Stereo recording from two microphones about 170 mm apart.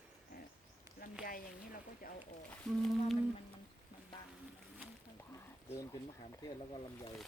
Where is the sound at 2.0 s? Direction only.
55° left (ahead or behind).